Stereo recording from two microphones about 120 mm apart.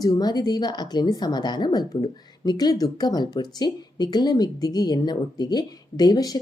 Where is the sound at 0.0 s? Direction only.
35° left (ahead or behind).